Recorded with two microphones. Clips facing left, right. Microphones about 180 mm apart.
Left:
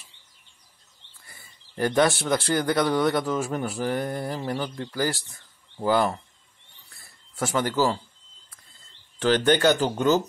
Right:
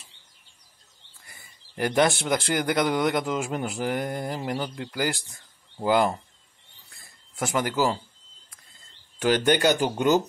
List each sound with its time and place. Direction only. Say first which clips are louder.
1.2 s speech: even; 15° right (ahead or behind)
7.3 s speech: left 1 dB; 15° right (ahead or behind)
9.2 s speech: left 1 dB; 10° right (ahead or behind)